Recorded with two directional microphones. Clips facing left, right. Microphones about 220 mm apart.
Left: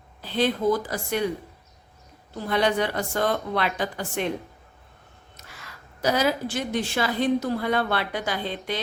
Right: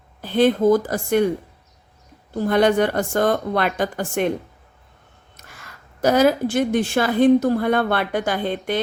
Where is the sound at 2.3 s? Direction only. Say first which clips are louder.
Right 7 dB; 45° right (ahead or behind).